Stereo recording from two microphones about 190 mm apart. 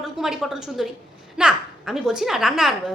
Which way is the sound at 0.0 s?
Centre (ahead or behind).